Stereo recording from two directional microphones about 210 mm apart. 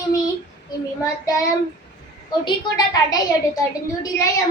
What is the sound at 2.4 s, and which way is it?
A woman's voice, 20° left (ahead or behind).